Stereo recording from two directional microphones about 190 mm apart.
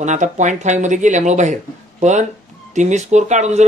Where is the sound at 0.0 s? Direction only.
40° right (ahead or behind).